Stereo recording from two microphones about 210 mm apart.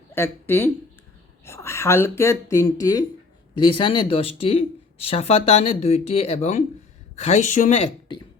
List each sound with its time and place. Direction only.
0.1 s speech: 10° left (ahead or behind); by 7.9 s 35° left (ahead or behind)